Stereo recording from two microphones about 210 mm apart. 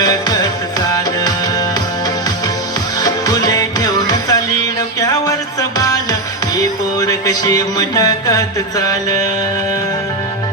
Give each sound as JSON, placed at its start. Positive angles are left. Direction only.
{"t": 0.0, "sound": "music", "side_deg": 20}
{"t": 3.0, "sound": "music", "side_deg": 20}